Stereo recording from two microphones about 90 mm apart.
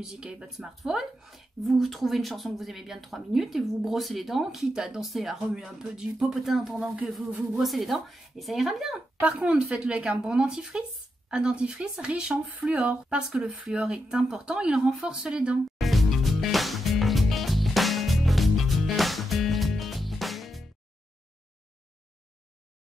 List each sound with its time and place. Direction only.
0.0 s speech: 10° right (ahead or behind)
9.2 s speech: 15° right (ahead or behind)
15.8 s music: centre (ahead or behind)